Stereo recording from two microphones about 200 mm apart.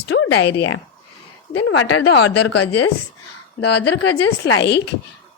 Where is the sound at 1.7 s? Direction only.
80° left.